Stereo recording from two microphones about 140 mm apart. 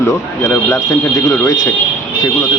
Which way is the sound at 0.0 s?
20° left (ahead or behind).